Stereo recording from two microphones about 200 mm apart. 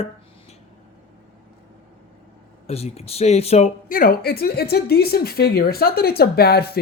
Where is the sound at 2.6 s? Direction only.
30° left (ahead or behind).